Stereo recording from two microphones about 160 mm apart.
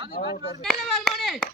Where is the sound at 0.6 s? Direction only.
Centre (ahead or behind).